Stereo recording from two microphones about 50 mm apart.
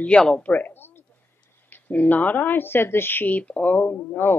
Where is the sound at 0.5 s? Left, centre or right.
Left.